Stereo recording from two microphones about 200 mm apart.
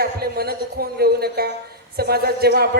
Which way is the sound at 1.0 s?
50° right (ahead or behind).